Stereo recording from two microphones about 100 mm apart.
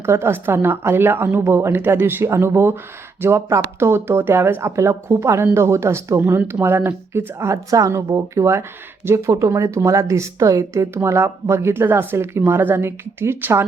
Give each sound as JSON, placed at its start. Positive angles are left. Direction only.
{"t": 0.0, "sound": "a woman's voice", "side_deg": -25}